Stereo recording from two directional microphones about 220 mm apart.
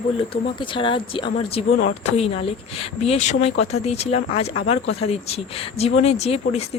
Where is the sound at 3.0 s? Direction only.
30° left (ahead or behind).